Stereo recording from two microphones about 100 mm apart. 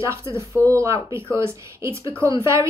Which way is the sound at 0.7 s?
30° right (ahead or behind).